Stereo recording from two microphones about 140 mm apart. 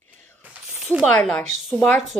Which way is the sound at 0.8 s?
Centre (ahead or behind).